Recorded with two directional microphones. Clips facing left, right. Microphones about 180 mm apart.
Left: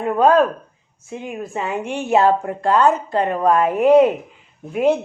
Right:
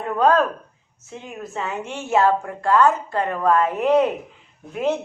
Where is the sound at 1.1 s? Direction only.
15° left (ahead or behind).